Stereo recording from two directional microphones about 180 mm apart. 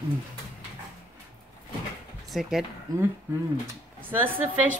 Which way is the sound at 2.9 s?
20° right (ahead or behind).